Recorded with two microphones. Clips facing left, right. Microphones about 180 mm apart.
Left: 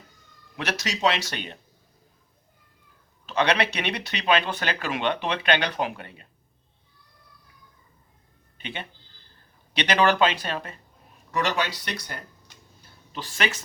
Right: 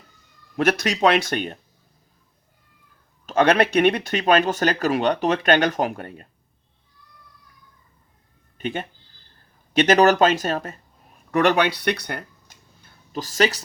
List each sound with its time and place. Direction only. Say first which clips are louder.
0.5 s speech: right 9 dB; 50° right (ahead or behind)
3.2 s speech: right 6 dB; 50° right (ahead or behind)
8.5 s speech: right 9 dB; 45° right (ahead or behind)
11.3 s speech: right 8 dB; 60° right (ahead or behind)
12.5 s a sound: even; 45° right (ahead or behind)